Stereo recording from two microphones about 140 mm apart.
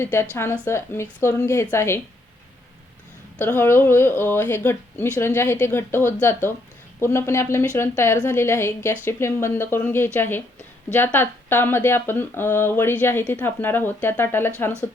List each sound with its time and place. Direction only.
0.0 s a woman's voice: 20° left (ahead or behind)
3.3 s a woman's voice: 15° left (ahead or behind)